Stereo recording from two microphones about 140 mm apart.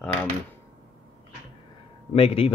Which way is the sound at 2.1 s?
45° left (ahead or behind).